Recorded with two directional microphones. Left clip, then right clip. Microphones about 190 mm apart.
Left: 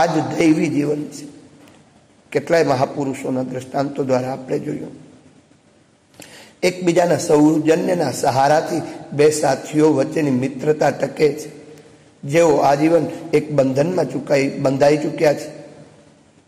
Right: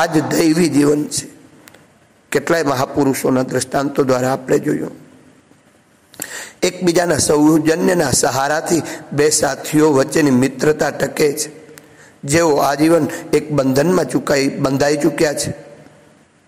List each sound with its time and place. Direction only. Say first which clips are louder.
0.0 s a man's voice: right 1 dB; 20° right (ahead or behind)
2.2 s a man's voice: even; 20° right (ahead or behind)
6.1 s a man's voice: right 11 dB; 25° right (ahead or behind)